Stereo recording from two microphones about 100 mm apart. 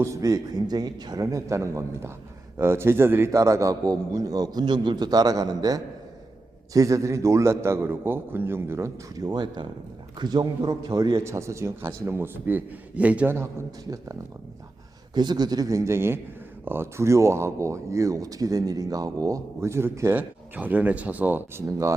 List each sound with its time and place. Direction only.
0.0 s a man's voice: 30° right (ahead or behind)
11.1 s speech: 30° right (ahead or behind)
15.1 s a man's voice: 45° right (ahead or behind); by 21.6 s 20° right (ahead or behind)